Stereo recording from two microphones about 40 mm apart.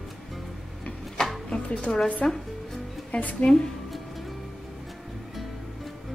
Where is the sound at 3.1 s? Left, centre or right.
Left.